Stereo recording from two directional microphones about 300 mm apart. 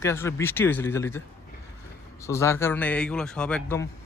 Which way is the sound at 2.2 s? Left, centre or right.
Centre.